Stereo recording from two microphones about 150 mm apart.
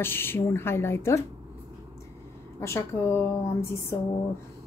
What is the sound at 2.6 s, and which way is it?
A woman's voice, 15° left (ahead or behind).